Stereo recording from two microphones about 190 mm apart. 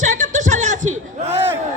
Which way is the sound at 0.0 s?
40° right (ahead or behind).